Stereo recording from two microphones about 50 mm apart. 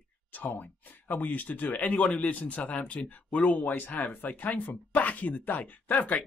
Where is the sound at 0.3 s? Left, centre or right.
Left.